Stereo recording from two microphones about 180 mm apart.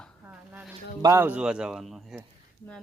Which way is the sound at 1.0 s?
15° right (ahead or behind).